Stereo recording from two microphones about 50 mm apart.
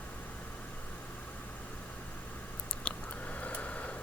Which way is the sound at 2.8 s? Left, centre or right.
Left.